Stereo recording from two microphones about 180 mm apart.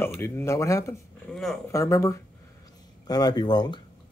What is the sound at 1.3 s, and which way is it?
Speech, centre (ahead or behind).